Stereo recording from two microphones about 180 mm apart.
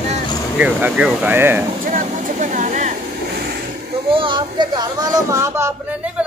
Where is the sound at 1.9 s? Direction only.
45° right (ahead or behind).